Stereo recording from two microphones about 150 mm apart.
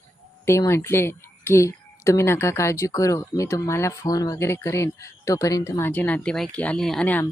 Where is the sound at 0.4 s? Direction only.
20° left (ahead or behind).